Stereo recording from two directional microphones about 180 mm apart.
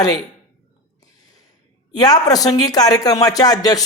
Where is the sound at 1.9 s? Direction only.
20° left (ahead or behind).